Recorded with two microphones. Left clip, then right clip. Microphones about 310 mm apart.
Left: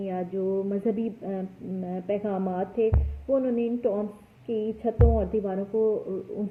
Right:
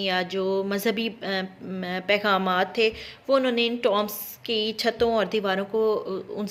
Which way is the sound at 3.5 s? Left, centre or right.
Right.